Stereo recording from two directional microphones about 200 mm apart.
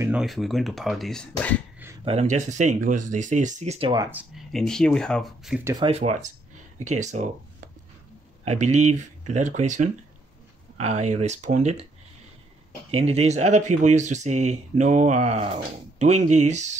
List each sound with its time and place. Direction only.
0.0 s speech: 5° right (ahead or behind)
2.0 s speech: 35° right (ahead or behind)
3.9 s speech: 10° right (ahead or behind)
5.6 s speech: 15° right (ahead or behind)
5.9 s speech: 35° right (ahead or behind)
8.5 s speech: 35° right (ahead or behind)
12.9 s speech: 30° right (ahead or behind)